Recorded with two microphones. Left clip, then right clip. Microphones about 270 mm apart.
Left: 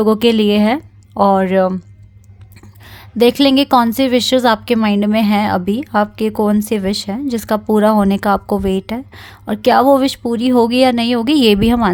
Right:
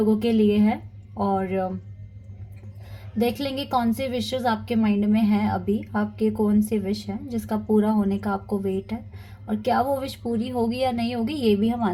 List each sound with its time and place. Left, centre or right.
0.0 s a woman's voice: left
3.2 s a woman's voice: left